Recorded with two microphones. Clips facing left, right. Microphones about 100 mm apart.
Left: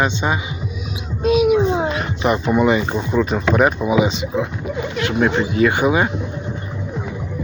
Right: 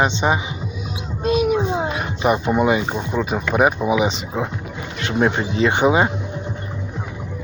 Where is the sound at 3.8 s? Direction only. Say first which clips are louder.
Left 2 dB; 20° right (ahead or behind).